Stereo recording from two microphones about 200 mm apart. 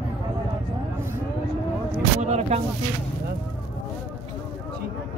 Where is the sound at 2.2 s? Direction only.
35° right (ahead or behind).